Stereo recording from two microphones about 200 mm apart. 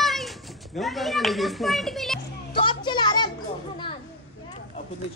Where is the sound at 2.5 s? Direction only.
25° left (ahead or behind).